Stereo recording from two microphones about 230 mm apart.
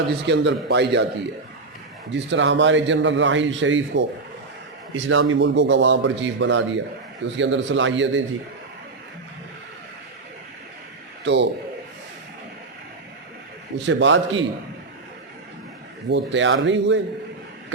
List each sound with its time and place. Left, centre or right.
0.3 s a man's voice: right
2.1 s a man's voice: right
11.2 s speech: right
13.7 s a man's voice: right
16.0 s a man's voice: right